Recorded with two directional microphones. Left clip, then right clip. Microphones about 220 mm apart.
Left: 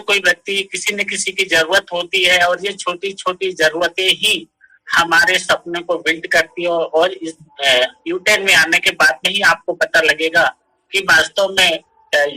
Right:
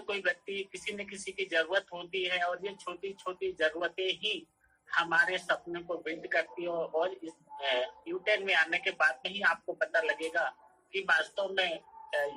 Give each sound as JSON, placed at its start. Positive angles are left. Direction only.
{"t": 0.0, "sound": "speech", "side_deg": 40}